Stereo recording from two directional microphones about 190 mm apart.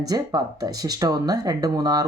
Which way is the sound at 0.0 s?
20° right (ahead or behind).